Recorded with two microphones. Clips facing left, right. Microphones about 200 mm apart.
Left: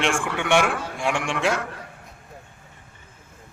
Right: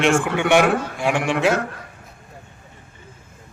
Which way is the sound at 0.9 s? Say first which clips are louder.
Right 5 dB; 5° right (ahead or behind).